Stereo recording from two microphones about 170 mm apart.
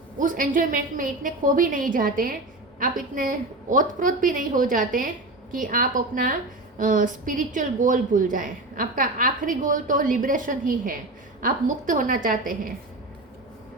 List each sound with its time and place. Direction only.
0.2 s a woman's voice: 50° right (ahead or behind)